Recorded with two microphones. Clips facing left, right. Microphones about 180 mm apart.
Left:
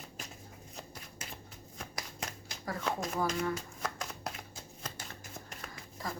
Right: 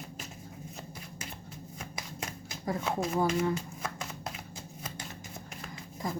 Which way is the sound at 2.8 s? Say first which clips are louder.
Right 2 dB; 5° right (ahead or behind).